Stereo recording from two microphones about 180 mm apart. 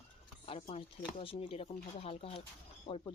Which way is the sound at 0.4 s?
30° left (ahead or behind).